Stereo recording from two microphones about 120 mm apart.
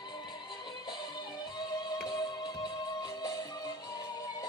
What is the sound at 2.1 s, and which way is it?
Music, 35° left (ahead or behind).